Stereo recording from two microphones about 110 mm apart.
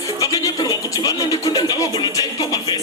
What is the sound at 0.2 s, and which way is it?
Speech, 30° left (ahead or behind).